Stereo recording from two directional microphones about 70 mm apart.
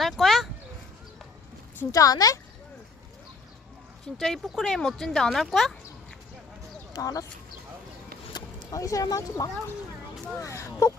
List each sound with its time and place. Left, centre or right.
0.0 s a sound: centre
1.9 s speech: left
4.2 s speech: centre
6.9 s speech: left
8.4 s a sound: left
8.7 s speech: left
10.4 s speech: left